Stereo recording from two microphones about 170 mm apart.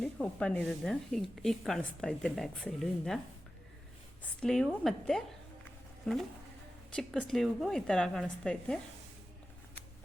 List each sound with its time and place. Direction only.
0.0 s speech: 5° left (ahead or behind)
4.2 s speech: 5° left (ahead or behind)